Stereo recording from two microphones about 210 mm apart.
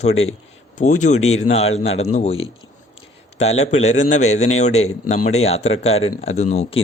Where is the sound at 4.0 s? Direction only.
35° left (ahead or behind).